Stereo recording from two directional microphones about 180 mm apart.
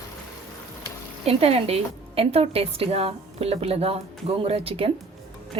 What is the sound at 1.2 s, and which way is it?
A woman's voice, 35° right (ahead or behind).